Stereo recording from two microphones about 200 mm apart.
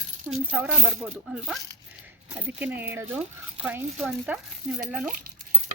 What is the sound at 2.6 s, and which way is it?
Speech, 10° right (ahead or behind).